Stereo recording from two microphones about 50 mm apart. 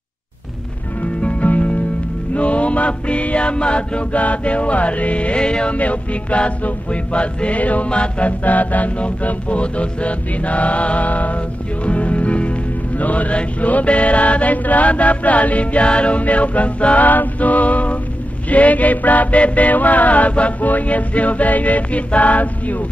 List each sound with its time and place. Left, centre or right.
1.2 s music: left
2.3 s mantra: left
18.5 s music: left